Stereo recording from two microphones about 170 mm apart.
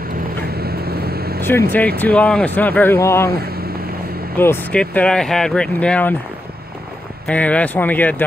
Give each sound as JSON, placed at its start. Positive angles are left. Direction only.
{"t": 0.6, "sound": "vehicle", "side_deg": -65}
{"t": 1.4, "sound": "speech", "side_deg": 15}
{"t": 3.3, "sound": "speech", "side_deg": -65}
{"t": 4.4, "sound": "speech", "side_deg": 10}
{"t": 7.2, "sound": "speech", "side_deg": 10}